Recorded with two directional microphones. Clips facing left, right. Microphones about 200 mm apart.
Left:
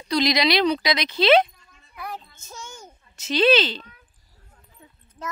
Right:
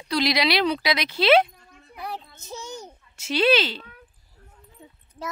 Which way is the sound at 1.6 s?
55° right (ahead or behind).